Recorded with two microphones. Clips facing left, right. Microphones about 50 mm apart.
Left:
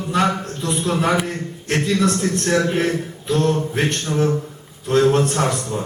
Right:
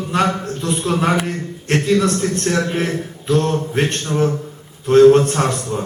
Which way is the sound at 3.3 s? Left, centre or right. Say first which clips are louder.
Right 1 dB; right.